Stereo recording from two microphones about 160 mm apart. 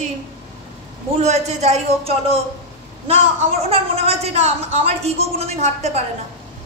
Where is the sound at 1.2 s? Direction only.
45° right (ahead or behind).